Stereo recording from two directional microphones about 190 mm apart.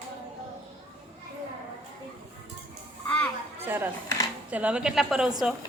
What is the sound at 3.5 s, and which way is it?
Chop, 10° right (ahead or behind).